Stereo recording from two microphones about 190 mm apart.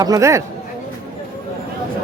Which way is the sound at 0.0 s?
15° right (ahead or behind).